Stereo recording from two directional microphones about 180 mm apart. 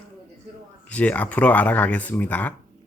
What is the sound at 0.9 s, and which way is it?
Speech, 10° left (ahead or behind).